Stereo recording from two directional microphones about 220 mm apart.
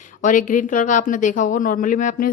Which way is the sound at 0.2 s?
35° left (ahead or behind).